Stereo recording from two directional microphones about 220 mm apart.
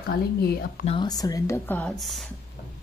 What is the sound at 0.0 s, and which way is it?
Speech, 45° left (ahead or behind).